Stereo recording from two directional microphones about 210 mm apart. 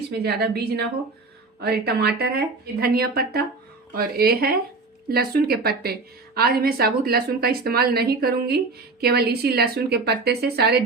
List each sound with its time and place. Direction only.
0.1 s a woman's voice: 50° right (ahead or behind)